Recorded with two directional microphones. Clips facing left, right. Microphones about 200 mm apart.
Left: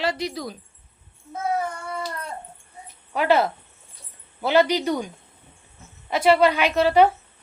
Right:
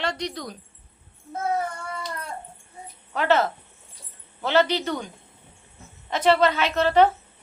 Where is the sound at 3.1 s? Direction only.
10° left (ahead or behind).